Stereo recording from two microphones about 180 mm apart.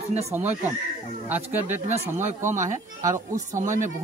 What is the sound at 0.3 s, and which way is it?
Speech, 10° right (ahead or behind).